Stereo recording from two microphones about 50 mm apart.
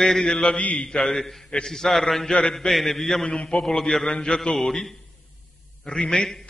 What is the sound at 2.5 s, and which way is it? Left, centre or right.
Speech, centre.